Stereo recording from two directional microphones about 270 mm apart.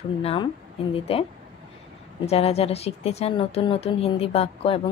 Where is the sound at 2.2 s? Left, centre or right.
Left.